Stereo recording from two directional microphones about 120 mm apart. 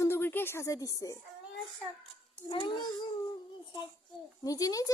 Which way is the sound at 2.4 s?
40° left (ahead or behind).